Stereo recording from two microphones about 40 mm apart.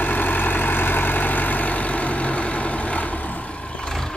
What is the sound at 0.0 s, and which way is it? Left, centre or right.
Vehicle, left.